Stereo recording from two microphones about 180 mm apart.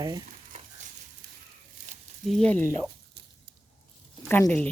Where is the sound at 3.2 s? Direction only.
65° right (ahead or behind).